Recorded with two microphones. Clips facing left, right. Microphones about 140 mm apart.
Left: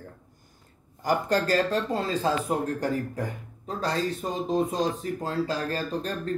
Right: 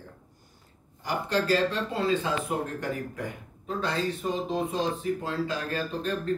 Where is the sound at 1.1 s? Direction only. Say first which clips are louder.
Left 2 dB; 45° left (ahead or behind).